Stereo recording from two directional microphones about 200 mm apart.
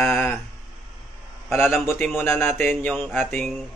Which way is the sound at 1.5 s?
10° left (ahead or behind).